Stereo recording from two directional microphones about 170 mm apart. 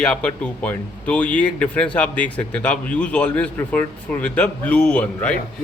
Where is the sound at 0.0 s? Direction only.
5° left (ahead or behind).